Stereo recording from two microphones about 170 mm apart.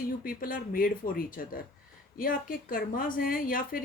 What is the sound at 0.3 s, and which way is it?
Speech, 55° left (ahead or behind).